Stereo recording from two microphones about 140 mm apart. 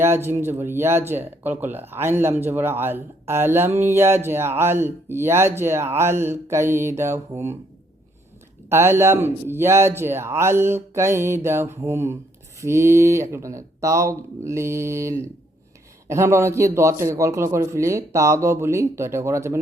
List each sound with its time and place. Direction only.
0.0 s speech: 15° right (ahead or behind)
8.7 s a man's voice: 15° right (ahead or behind)